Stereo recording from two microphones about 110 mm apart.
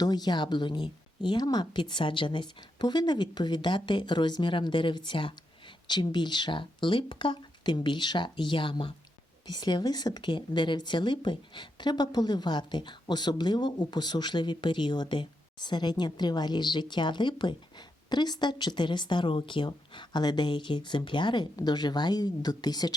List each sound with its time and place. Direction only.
0.0 s a woman's voice: 40° left (ahead or behind)